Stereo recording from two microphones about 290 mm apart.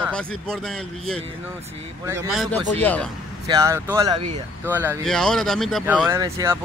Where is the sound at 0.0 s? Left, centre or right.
Centre.